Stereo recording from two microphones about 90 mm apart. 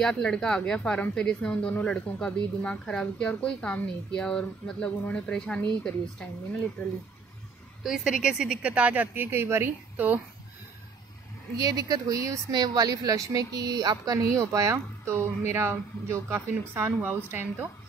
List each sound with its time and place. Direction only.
0.0 s a woman's voice: 5° left (ahead or behind)
7.8 s speech: 5° right (ahead or behind)
11.5 s speech: 40° right (ahead or behind)
12.5 s speech: 50° right (ahead or behind); by 17.6 s 25° right (ahead or behind)